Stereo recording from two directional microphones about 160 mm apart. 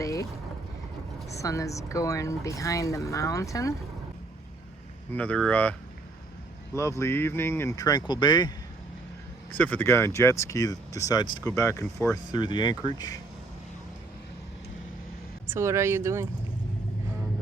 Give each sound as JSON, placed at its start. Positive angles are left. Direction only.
{"t": 0.0, "sound": "boat", "side_deg": 20}
{"t": 1.3, "sound": "speech", "side_deg": 20}
{"t": 5.1, "sound": "speech", "side_deg": 10}
{"t": 6.7, "sound": "speech", "side_deg": 15}
{"t": 9.6, "sound": "speech", "side_deg": 10}
{"t": 15.4, "sound": "speech", "side_deg": -15}